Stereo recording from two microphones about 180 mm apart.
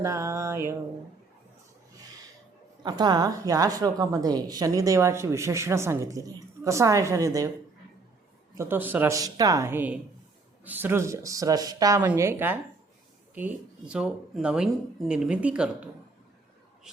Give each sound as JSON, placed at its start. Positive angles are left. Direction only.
{"t": 0.0, "sound": "speech", "side_deg": -15}
{"t": 2.8, "sound": "a woman's voice", "side_deg": -25}
{"t": 8.5, "sound": "speech", "side_deg": -10}